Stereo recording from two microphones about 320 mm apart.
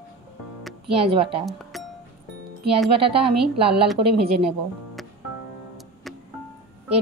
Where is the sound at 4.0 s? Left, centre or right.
Right.